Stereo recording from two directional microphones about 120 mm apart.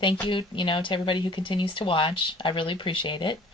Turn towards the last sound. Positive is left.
turn(degrees=45)  # may be behind; listen again after turning